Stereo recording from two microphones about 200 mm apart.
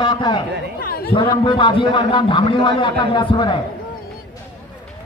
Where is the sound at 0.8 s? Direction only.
50° left (ahead or behind).